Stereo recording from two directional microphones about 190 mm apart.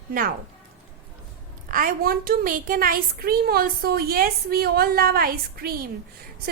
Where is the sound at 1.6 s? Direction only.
45° right (ahead or behind).